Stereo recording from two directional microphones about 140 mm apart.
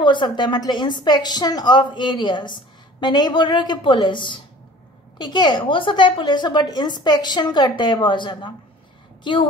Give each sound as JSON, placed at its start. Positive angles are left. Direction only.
{"t": 0.0, "sound": "a woman's voice", "side_deg": 35}